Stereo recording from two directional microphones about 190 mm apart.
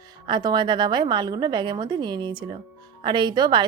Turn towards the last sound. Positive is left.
turn(degrees=-25)  # may be behind; listen again after turning